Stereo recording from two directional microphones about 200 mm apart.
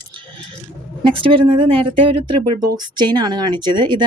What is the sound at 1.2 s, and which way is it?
Speech, 25° right (ahead or behind).